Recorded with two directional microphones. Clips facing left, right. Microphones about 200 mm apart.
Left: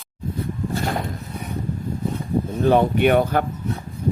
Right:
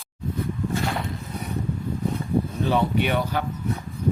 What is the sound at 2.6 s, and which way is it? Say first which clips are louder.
Speech: left 9 dB; 55° left (ahead or behind).